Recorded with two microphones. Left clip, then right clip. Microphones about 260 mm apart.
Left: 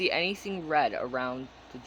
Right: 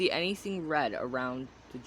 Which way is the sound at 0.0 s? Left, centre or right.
Right.